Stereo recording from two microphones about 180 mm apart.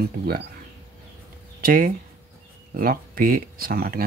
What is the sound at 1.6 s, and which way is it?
Speech, 50° right (ahead or behind).